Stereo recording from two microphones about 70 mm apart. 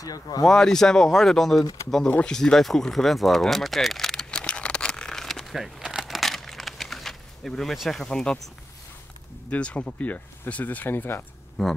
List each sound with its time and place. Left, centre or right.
0.0 s speech: left
0.4 s speech: centre
2.0 s speech: left
2.3 s a sound: centre
9.5 s speech: centre
11.6 s speech: centre